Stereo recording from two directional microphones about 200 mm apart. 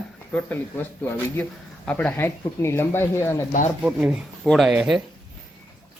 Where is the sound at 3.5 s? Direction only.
40° left (ahead or behind).